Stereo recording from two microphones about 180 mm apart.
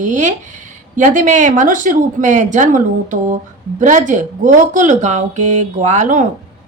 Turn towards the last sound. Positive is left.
turn(degrees=-45)  # may be behind; listen again after turning